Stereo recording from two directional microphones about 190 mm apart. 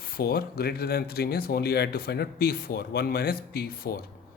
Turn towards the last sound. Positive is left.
turn(degrees=55)  # may be behind; listen again after turning